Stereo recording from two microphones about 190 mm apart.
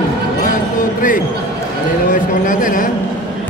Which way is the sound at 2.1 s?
45° left (ahead or behind).